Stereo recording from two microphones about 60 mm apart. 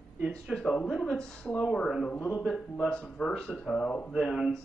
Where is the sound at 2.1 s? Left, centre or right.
Left.